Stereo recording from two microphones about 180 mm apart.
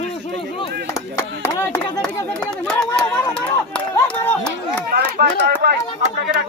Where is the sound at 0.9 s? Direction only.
15° left (ahead or behind).